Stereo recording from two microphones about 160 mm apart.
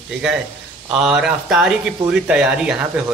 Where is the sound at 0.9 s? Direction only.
5° right (ahead or behind).